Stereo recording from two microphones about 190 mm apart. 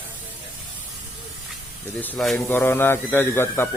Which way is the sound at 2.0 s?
5° left (ahead or behind).